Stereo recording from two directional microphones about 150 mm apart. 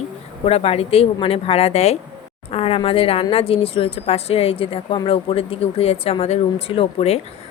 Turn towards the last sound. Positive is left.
turn(degrees=40)  # may be behind; listen again after turning